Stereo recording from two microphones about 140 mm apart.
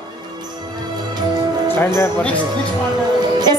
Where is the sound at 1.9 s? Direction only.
20° left (ahead or behind).